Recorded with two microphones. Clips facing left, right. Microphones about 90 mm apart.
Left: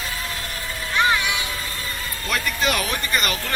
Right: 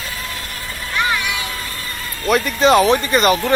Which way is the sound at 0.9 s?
20° left (ahead or behind).